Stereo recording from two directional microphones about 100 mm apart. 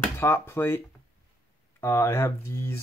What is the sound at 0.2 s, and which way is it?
Speech, 25° left (ahead or behind).